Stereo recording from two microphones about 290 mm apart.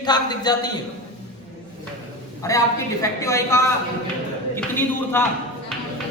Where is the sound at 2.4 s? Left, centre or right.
Centre.